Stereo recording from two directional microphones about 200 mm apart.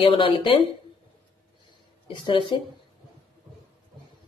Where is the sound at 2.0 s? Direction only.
25° left (ahead or behind).